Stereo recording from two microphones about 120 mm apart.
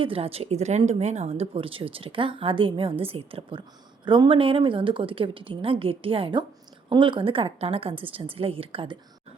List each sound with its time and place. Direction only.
0.0 s speech: 50° right (ahead or behind)